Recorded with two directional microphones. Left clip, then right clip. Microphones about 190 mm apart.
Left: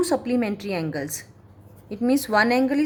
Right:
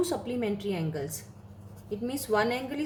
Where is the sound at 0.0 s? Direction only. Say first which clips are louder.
Left 7 dB; 50° left (ahead or behind).